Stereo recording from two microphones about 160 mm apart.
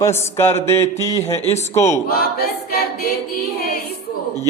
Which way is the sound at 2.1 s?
70° left (ahead or behind).